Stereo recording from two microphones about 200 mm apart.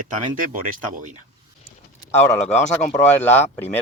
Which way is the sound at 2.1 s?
10° left (ahead or behind).